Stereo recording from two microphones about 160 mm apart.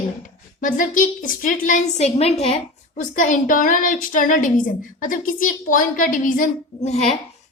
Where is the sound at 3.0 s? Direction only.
55° left (ahead or behind).